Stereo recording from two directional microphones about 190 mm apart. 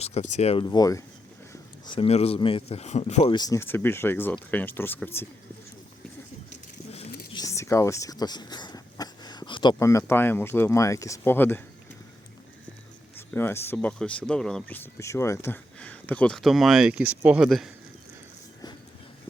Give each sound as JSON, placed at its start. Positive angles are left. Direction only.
{"t": 0.0, "sound": "speech", "side_deg": 35}
{"t": 0.6, "sound": "speech", "side_deg": 20}
{"t": 3.3, "sound": "speech", "side_deg": 20}
{"t": 7.3, "sound": "a sound", "side_deg": 15}
{"t": 9.7, "sound": "speech", "side_deg": 15}
{"t": 13.1, "sound": "speech", "side_deg": 10}